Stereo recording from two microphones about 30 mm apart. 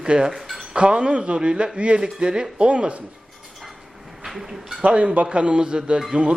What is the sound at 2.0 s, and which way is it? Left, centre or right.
Speech, right.